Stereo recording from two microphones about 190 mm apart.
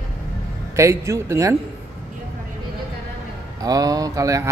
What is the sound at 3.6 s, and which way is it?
Speech, 20° right (ahead or behind).